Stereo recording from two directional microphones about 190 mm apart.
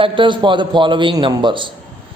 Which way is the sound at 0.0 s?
25° right (ahead or behind).